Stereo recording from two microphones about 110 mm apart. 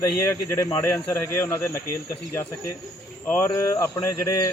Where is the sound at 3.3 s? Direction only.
20° left (ahead or behind).